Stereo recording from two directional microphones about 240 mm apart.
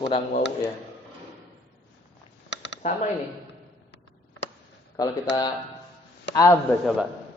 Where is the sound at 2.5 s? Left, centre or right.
Left.